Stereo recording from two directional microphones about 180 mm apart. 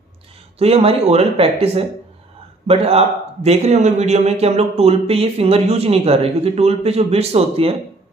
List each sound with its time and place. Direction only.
0.6 s a man's voice: 35° right (ahead or behind)